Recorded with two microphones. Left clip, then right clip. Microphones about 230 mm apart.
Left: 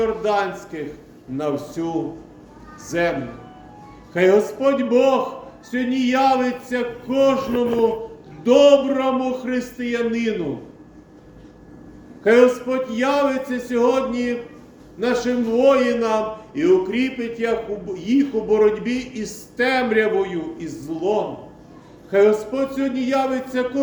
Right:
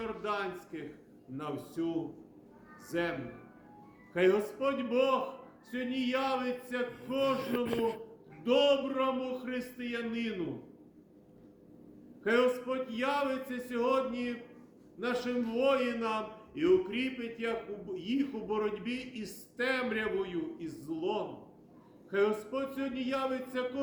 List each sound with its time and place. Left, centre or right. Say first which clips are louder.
0.0 s a man's voice: left 16 dB; centre
2.9 s a man's voice: left 13 dB; centre
7.4 s a man's voice: left 13 dB; right
8.4 s a man's voice: left 14 dB; centre
12.2 s a man's voice: left 14 dB; centre